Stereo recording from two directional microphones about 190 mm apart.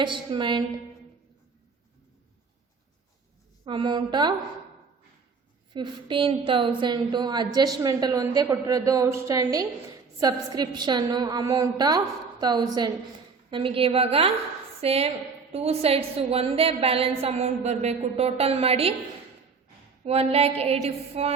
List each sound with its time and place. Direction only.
0.0 s a woman's voice: 25° right (ahead or behind)
3.7 s a woman's voice: 25° right (ahead or behind)
5.7 s a woman's voice: 25° right (ahead or behind)
20.1 s a woman's voice: 30° right (ahead or behind)